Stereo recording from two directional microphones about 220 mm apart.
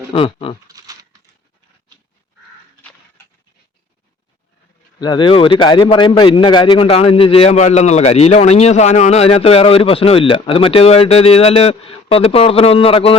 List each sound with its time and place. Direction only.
0.1 s a man's voice: 25° left (ahead or behind)
0.7 s speech: 15° right (ahead or behind)
4.9 s a man's voice: 20° left (ahead or behind)